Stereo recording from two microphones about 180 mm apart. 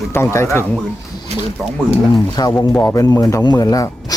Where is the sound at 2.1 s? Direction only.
20° left (ahead or behind).